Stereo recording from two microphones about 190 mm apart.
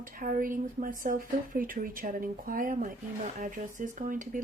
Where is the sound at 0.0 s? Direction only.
45° right (ahead or behind).